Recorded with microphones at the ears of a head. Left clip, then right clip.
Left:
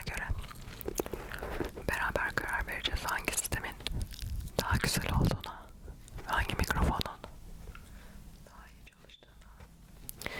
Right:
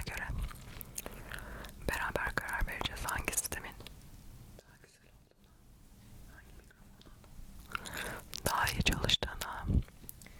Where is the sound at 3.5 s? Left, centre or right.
Left.